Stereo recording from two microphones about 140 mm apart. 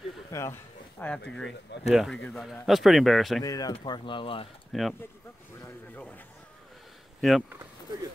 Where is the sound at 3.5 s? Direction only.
25° left (ahead or behind).